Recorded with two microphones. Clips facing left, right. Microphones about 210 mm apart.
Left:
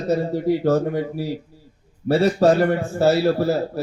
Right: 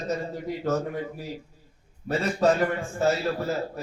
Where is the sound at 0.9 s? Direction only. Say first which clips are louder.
Left 8 dB; 75° left (ahead or behind).